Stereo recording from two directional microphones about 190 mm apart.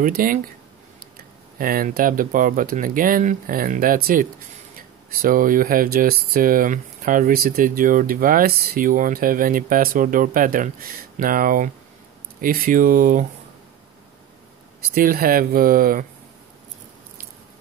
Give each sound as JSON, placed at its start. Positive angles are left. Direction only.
{"t": 0.0, "sound": "speech", "side_deg": -45}
{"t": 1.6, "sound": "speech", "side_deg": -50}
{"t": 15.0, "sound": "speech", "side_deg": -50}